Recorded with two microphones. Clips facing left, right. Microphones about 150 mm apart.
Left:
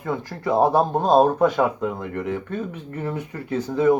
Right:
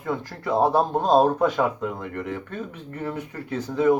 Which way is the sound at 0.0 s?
5° left (ahead or behind).